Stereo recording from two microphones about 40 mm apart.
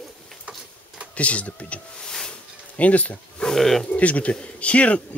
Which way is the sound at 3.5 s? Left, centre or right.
Centre.